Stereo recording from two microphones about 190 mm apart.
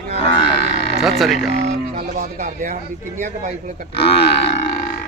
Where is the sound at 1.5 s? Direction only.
35° right (ahead or behind).